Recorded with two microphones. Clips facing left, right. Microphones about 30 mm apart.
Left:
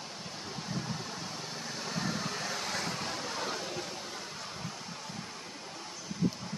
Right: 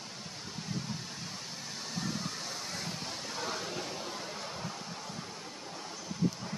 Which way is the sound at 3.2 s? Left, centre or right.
Centre.